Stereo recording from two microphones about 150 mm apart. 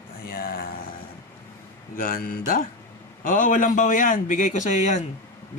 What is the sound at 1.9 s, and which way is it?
A man's voice, 70° left (ahead or behind).